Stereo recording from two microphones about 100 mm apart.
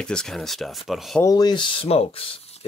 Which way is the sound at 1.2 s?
40° left (ahead or behind).